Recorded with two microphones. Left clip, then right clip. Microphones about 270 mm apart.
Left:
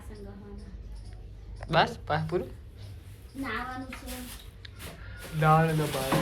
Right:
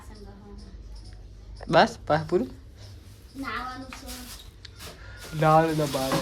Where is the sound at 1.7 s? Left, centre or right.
Right.